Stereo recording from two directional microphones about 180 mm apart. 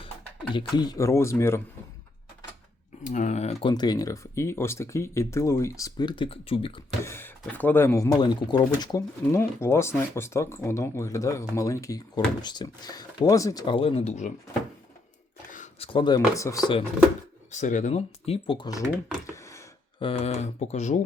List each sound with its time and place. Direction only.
0.5 s speech: 25° left (ahead or behind)
3.0 s speech: 40° left (ahead or behind)
3.7 s speech: 25° left (ahead or behind)
7.0 s speech: 15° left (ahead or behind); by 14.3 s 40° left (ahead or behind)
15.5 s a sound: 40° left (ahead or behind)
15.9 s speech: 25° left (ahead or behind)
17.5 s speech: 45° left (ahead or behind); by 18.8 s 25° left (ahead or behind)
19.3 s a sound: 15° left (ahead or behind)
20.0 s speech: 30° left (ahead or behind)